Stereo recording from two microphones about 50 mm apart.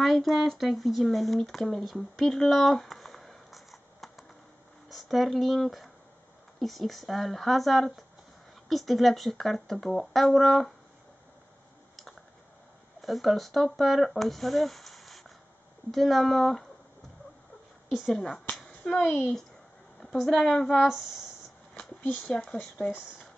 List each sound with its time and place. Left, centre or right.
0.0 s speech: centre
2.4 s a sound: centre
4.8 s speech: centre
13.0 s speech: centre
17.8 s speech: centre
18.9 s speech: centre
22.2 s speech: centre